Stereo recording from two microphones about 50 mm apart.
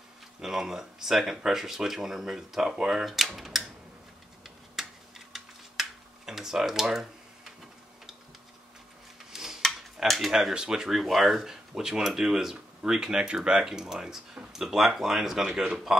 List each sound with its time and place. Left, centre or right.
0.4 s speech: centre
3.3 s tick-tock: centre
4.8 s a sound: centre
5.3 s tick-tock: centre
9.3 s a sound: centre
10.0 s speech: centre
10.5 s speech: centre